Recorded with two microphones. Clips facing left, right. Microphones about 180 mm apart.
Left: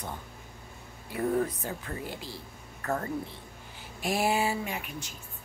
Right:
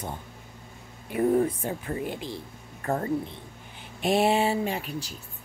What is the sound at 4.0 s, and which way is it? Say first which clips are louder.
Speech: right 5 dB; 25° right (ahead or behind).